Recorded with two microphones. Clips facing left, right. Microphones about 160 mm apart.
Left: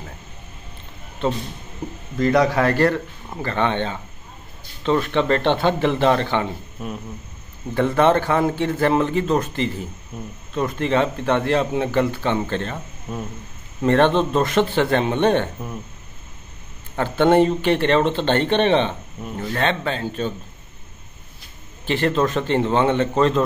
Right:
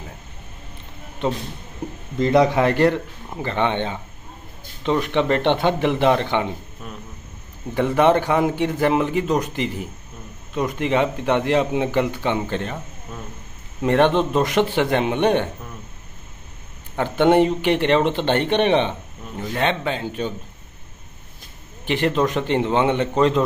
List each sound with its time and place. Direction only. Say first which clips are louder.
1.2 s speech: left 1 dB; 15° right (ahead or behind)
7.7 s speech: even; 15° right (ahead or behind)
13.8 s speech: left 1 dB; 15° right (ahead or behind)
16.9 s speech: even; 15° right (ahead or behind)
21.8 s speech: even; 15° right (ahead or behind)